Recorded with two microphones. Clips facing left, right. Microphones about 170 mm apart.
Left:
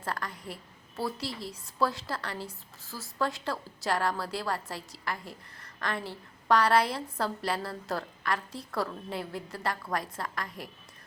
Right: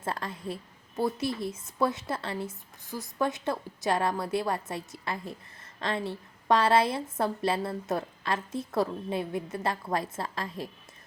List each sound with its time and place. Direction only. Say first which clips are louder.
0.0 s a woman's voice: right 3 dB; 25° right (ahead or behind)